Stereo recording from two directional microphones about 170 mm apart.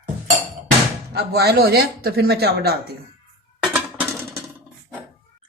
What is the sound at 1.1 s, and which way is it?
Speech, 70° right (ahead or behind).